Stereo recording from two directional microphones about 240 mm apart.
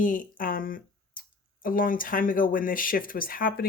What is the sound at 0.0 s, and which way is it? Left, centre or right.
Speech, left.